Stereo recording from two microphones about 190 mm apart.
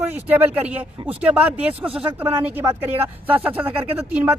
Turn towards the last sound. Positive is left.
turn(degrees=-10)  # may be behind; listen again after turning